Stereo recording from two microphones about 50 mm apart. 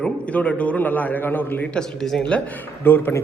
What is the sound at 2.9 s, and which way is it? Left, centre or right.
Speech, left.